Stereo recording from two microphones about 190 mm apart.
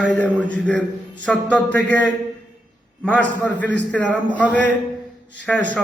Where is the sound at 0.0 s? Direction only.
5° left (ahead or behind).